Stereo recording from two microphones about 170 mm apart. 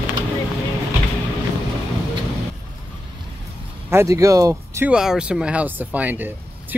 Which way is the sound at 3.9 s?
15° right (ahead or behind).